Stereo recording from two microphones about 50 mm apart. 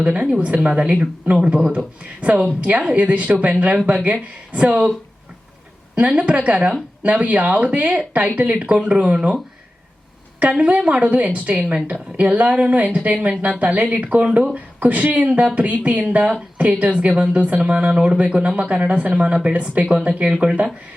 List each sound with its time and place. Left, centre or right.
0.0 s speech: right
6.0 s speech: right
10.4 s speech: right